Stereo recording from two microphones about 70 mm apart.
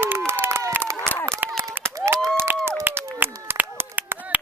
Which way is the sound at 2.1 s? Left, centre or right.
Right.